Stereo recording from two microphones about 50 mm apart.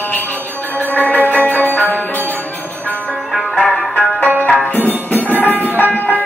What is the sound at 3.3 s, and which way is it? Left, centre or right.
Music, centre.